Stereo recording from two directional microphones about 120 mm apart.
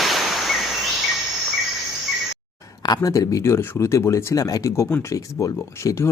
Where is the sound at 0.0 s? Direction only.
Centre (ahead or behind).